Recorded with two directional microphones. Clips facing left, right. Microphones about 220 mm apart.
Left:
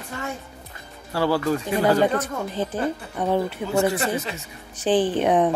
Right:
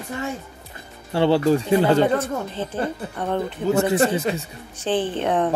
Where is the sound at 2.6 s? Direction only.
15° left (ahead or behind).